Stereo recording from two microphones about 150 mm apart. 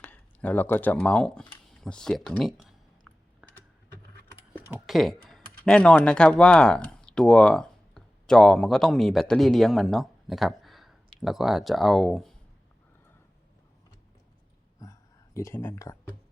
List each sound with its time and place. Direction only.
0.0 s speech: 10° left (ahead or behind)
3.1 s typing: centre (ahead or behind)
3.4 s computer keyboard: 5° right (ahead or behind)
4.9 s speech: centre (ahead or behind)
14.8 s a sound: 20° left (ahead or behind)